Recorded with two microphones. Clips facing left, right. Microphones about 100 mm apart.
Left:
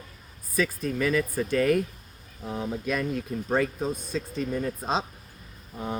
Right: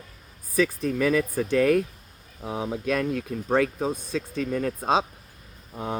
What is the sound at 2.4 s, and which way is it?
Speech, 85° right.